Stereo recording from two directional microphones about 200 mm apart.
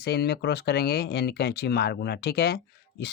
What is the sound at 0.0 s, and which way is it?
Speech, 55° left (ahead or behind).